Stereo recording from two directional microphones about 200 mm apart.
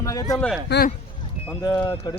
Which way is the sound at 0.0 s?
15° left (ahead or behind).